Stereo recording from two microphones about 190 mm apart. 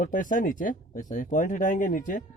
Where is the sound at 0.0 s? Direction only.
45° left (ahead or behind).